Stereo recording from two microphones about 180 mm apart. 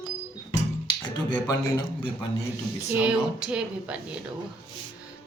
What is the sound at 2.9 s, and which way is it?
Speech, 5° right (ahead or behind).